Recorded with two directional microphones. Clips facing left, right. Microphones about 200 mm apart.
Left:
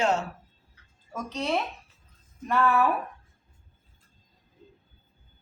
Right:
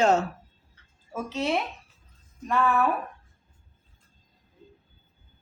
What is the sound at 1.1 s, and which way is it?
Speech, 5° right (ahead or behind).